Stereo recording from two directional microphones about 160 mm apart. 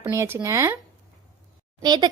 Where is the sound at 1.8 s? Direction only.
25° right (ahead or behind).